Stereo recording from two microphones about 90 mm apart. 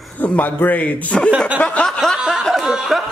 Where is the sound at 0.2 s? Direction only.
20° left (ahead or behind).